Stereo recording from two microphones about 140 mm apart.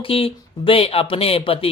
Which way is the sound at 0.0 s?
40° left (ahead or behind).